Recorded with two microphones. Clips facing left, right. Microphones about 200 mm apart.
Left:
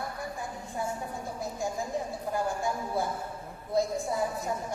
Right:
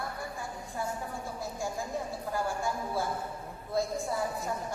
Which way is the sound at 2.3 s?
20° left (ahead or behind).